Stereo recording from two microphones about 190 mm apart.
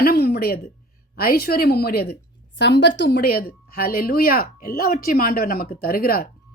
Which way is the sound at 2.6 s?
70° left (ahead or behind).